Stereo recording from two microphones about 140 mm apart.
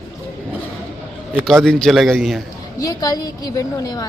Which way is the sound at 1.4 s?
5° left (ahead or behind).